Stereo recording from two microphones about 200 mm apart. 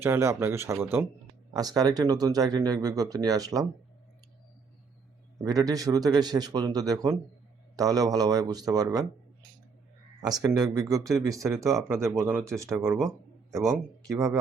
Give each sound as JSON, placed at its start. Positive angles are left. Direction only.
{"t": 0.0, "sound": "speech", "side_deg": -10}
{"t": 5.4, "sound": "speech", "side_deg": -20}
{"t": 10.2, "sound": "speech", "side_deg": -20}
{"t": 13.5, "sound": "speech", "side_deg": -15}